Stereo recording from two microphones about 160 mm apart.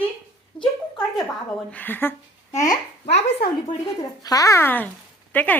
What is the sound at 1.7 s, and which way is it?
Speech, 10° left (ahead or behind).